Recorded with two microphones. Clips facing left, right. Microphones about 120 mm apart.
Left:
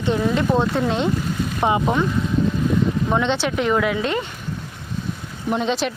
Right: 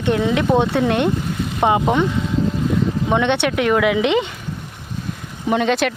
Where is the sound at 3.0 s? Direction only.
65° right (ahead or behind).